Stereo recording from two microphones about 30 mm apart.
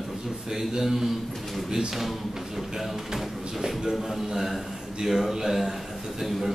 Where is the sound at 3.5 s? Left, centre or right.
Centre.